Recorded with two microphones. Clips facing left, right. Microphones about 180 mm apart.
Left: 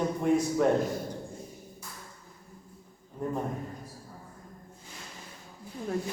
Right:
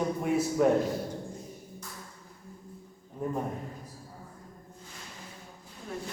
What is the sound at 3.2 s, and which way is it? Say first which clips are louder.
Speech: even; 5° right (ahead or behind).